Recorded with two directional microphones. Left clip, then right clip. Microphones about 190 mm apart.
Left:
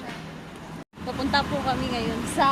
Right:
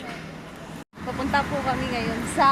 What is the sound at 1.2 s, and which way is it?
Speech, centre (ahead or behind).